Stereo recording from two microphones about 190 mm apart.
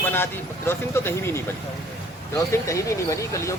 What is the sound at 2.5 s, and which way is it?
Speech, 15° left (ahead or behind).